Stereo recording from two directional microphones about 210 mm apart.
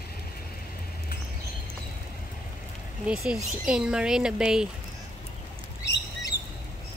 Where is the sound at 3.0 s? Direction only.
Centre (ahead or behind).